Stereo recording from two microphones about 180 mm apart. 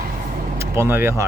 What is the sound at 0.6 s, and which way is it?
Speech, 15° right (ahead or behind).